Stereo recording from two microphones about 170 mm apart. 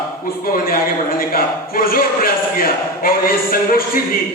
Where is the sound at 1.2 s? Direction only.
60° left (ahead or behind).